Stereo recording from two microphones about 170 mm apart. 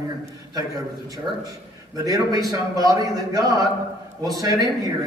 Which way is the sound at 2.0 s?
20° right (ahead or behind).